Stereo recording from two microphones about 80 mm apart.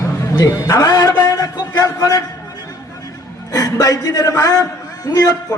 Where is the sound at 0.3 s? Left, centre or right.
Left.